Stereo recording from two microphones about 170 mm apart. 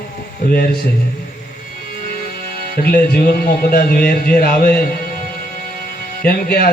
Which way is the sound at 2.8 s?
65° left (ahead or behind).